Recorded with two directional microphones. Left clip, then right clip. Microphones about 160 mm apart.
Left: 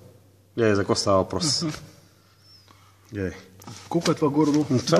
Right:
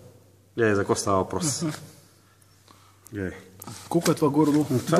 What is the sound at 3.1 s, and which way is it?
Speech, 65° left (ahead or behind).